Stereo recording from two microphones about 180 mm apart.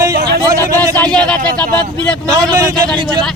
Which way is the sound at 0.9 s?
5° left (ahead or behind).